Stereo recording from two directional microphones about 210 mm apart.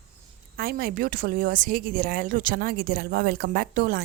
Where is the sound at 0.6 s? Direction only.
45° right (ahead or behind).